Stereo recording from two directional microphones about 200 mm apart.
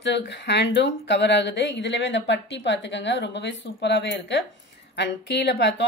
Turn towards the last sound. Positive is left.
turn(degrees=60)  # may be behind; listen again after turning